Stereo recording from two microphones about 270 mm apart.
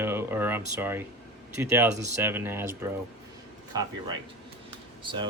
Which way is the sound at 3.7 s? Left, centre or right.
Centre.